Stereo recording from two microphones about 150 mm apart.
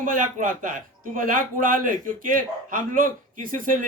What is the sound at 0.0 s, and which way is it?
A man's voice, 65° right (ahead or behind).